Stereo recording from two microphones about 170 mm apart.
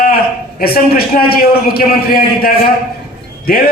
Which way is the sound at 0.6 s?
65° left (ahead or behind).